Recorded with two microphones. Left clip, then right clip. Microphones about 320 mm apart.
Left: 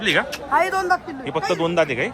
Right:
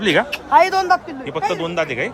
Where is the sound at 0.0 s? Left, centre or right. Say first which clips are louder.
Right 3 dB; centre.